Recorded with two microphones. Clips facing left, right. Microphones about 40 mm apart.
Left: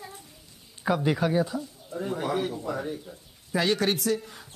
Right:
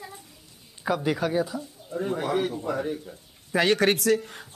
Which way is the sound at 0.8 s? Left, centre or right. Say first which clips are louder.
Left 1 dB; centre.